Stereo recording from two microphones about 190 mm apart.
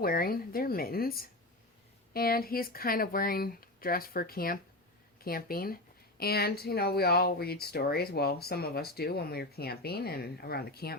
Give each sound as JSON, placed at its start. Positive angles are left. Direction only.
{"t": 0.0, "sound": "speech", "side_deg": 50}